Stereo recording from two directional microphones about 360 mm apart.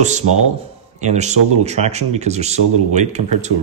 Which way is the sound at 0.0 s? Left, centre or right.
Centre.